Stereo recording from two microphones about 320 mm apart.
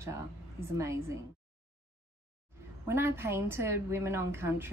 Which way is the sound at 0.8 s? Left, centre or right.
Centre.